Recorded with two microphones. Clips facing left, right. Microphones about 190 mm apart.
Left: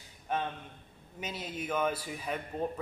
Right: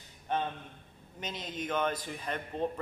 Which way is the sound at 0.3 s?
5° left (ahead or behind).